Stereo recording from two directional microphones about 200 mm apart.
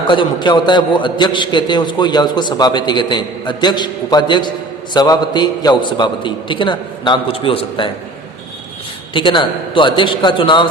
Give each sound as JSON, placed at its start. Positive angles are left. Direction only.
{"t": 0.1, "sound": "a man's voice", "side_deg": 25}
{"t": 9.1, "sound": "a man's voice", "side_deg": 25}